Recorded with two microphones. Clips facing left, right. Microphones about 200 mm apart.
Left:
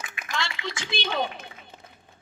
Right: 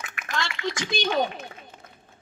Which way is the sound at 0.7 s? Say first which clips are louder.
Right 5 dB; 45° right (ahead or behind).